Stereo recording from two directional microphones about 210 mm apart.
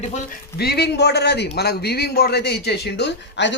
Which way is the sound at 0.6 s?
50° left (ahead or behind).